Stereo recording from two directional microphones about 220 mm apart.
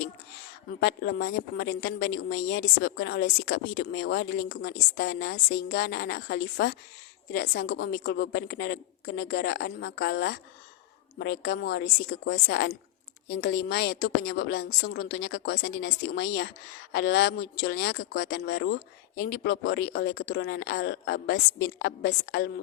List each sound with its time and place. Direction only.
0.8 s speech: 50° left (ahead or behind)